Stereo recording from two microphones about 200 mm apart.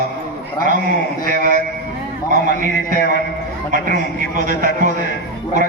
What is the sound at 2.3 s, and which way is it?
A man's voice, 45° right (ahead or behind).